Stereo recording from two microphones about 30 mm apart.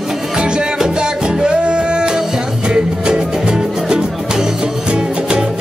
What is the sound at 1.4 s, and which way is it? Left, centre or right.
Music, right.